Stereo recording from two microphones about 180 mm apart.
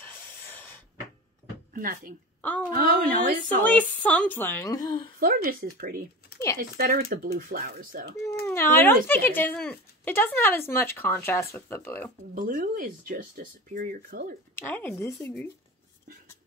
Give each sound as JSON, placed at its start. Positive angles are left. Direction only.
{"t": 0.0, "sound": "a sound", "side_deg": 10}
{"t": 1.7, "sound": "speech", "side_deg": -50}
{"t": 2.4, "sound": "speech", "side_deg": 10}
{"t": 2.7, "sound": "speech", "side_deg": -55}
{"t": 3.6, "sound": "speech", "side_deg": 10}
{"t": 5.2, "sound": "speech", "side_deg": -55}
{"t": 8.5, "sound": "speech", "side_deg": 10}
{"t": 12.4, "sound": "speech", "side_deg": -50}
{"t": 14.5, "sound": "speech", "side_deg": 10}